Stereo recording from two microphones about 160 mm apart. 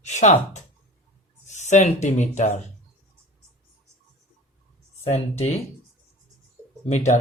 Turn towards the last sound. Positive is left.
turn(degrees=45)  # may be behind; listen again after turning